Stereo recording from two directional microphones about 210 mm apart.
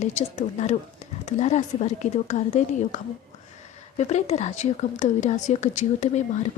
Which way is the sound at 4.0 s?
30° left (ahead or behind).